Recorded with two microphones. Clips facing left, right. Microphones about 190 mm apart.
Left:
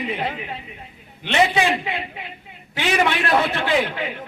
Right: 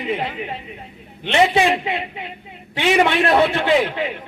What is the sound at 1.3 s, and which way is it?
Speech, 30° right (ahead or behind).